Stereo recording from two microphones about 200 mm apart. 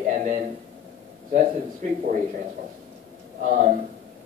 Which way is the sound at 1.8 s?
40° right (ahead or behind).